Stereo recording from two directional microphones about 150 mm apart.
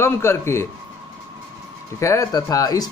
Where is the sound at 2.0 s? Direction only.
20° left (ahead or behind).